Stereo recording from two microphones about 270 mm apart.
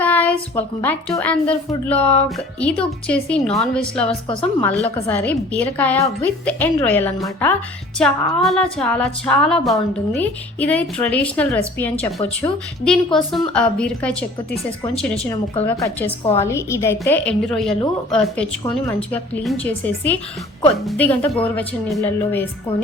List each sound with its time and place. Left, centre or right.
0.0 s a child's voice: centre
5.0 s a woman's voice: centre
16.0 s a woman's voice: left
16.5 s a woman's voice: centre